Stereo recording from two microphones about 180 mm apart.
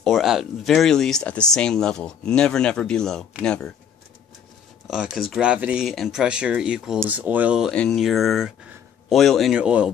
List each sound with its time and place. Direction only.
0.0 s speech: centre (ahead or behind)
4.8 s speech: centre (ahead or behind)